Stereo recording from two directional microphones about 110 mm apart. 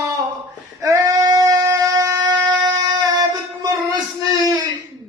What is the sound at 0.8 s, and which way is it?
Female singing, 30° right (ahead or behind).